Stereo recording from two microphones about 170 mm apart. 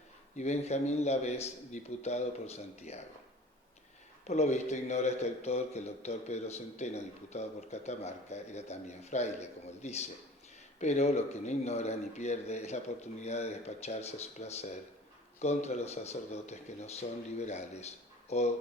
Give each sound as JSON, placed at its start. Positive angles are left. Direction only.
{"t": 0.3, "sound": "a man's voice", "side_deg": 40}
{"t": 4.3, "sound": "a man's voice", "side_deg": 40}